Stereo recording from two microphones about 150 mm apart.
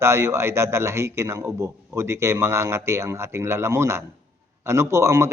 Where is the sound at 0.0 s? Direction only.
20° right (ahead or behind).